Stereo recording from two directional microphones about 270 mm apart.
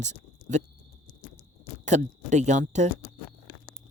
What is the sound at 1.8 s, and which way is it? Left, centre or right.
Speech, right.